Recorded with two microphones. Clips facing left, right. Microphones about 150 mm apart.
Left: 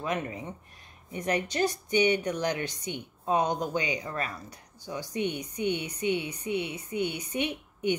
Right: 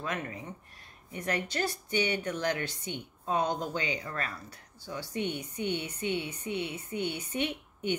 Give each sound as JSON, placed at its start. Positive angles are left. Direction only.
{"t": 0.0, "sound": "a woman's voice", "side_deg": 20}